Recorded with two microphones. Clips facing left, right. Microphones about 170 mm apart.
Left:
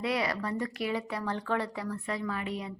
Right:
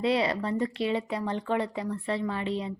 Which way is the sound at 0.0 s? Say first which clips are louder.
Right 5 dB; 25° right (ahead or behind).